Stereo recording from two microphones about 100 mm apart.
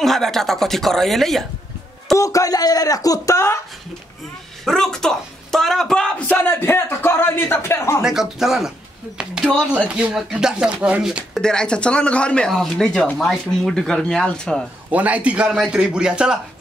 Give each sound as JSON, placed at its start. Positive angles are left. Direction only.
{"t": 0.0, "sound": "a woman's voice", "side_deg": 5}
{"t": 2.1, "sound": "speech", "side_deg": 35}
{"t": 4.6, "sound": "speech", "side_deg": 5}
{"t": 8.0, "sound": "a woman's voice", "side_deg": -5}
{"t": 9.5, "sound": "speech", "side_deg": 10}
{"t": 9.9, "sound": "a woman's voice", "side_deg": -10}
{"t": 14.9, "sound": "speech", "side_deg": -15}